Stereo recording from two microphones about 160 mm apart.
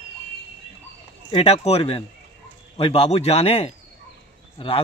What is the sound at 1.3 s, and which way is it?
Speech, 35° left (ahead or behind).